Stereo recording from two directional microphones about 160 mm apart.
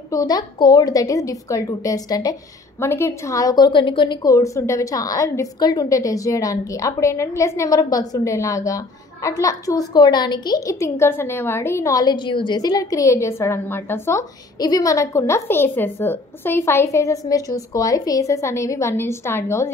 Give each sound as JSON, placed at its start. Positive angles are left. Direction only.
{"t": 0.1, "sound": "a woman's voice", "side_deg": 25}